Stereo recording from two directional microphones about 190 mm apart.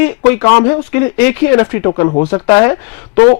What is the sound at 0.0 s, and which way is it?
Speech, 20° left (ahead or behind).